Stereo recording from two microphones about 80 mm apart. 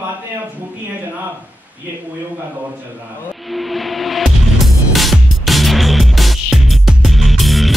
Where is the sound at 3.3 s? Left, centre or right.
Centre.